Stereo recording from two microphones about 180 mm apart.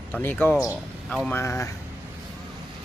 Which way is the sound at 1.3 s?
15° left (ahead or behind).